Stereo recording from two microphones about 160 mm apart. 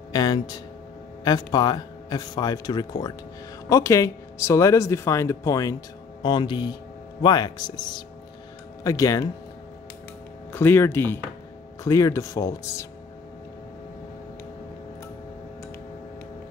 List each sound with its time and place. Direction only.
0.1 s speech: 25° left (ahead or behind)
10.5 s speech: 15° left (ahead or behind)